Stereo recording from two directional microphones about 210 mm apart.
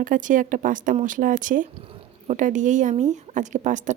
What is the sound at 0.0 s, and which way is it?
A woman's voice, 40° right (ahead or behind).